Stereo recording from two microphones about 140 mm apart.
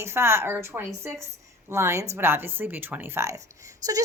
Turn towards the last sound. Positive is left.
turn(degrees=-25)  # may be behind; listen again after turning